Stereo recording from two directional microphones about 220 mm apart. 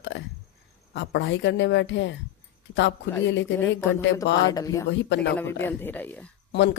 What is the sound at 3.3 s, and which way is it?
Speech, 55° left (ahead or behind).